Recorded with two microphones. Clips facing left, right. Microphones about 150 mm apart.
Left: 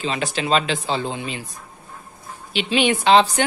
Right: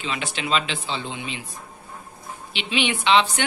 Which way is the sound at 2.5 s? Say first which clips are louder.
Left 6 dB; 45° left (ahead or behind).